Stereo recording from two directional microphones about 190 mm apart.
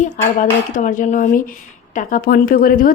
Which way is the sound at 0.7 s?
45° left (ahead or behind).